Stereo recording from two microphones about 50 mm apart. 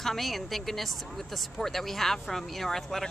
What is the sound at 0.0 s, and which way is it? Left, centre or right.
Speech, centre.